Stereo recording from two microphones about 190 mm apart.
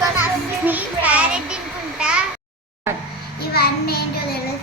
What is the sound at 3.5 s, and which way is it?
Child singing, 55° left (ahead or behind).